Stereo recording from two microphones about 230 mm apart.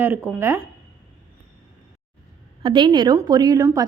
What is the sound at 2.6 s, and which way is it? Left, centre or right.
A woman's voice, right.